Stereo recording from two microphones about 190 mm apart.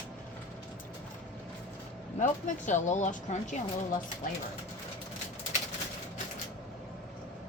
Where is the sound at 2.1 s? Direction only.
40° left (ahead or behind).